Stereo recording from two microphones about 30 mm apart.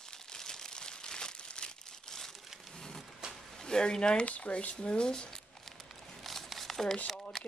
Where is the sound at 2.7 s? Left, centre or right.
Left.